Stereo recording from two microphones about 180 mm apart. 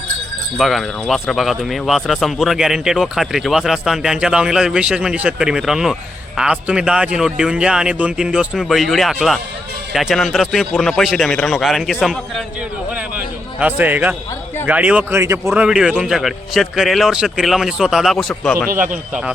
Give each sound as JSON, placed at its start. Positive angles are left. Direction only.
{"t": 0.5, "sound": "a man's voice", "side_deg": 0}
{"t": 18.7, "sound": "a man's voice", "side_deg": -50}